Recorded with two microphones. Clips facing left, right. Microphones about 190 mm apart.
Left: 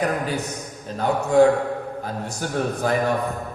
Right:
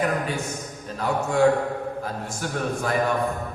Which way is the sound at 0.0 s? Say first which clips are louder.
Left 1 dB; 35° left (ahead or behind).